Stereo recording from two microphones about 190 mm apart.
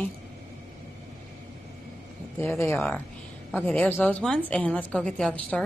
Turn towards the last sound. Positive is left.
turn(degrees=5)  # may be behind; listen again after turning